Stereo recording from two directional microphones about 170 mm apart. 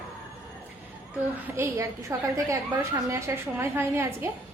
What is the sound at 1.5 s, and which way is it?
A woman's voice, 15° right (ahead or behind).